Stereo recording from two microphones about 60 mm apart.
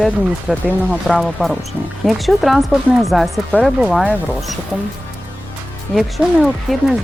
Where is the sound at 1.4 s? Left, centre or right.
Left.